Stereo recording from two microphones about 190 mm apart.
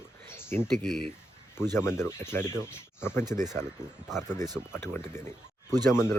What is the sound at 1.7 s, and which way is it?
Speech, 15° left (ahead or behind).